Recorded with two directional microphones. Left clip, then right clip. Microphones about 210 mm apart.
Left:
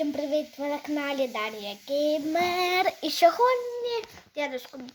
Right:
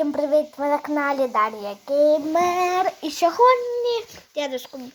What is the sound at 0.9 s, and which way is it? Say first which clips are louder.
Speech: right 7 dB; 10° right (ahead or behind).